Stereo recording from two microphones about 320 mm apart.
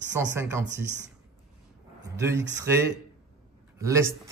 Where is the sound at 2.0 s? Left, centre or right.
Centre.